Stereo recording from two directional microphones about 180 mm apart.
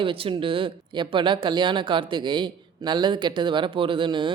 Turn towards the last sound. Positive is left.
turn(degrees=-25)  # may be behind; listen again after turning